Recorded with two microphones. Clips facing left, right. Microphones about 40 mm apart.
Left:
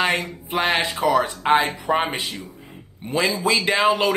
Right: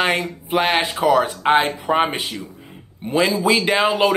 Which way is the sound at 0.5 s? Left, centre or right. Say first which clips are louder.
Right 3 dB; right.